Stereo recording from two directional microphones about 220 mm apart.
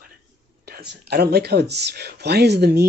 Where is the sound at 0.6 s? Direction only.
45° right (ahead or behind).